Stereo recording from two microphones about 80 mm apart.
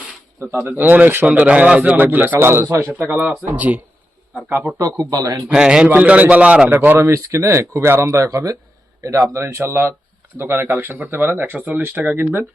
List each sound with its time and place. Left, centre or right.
0.5 s speech: right
3.2 s speech: right
4.4 s speech: right
4.9 s speech: right
5.5 s a man's voice: centre; by 7.0 s right
7.0 s speech: right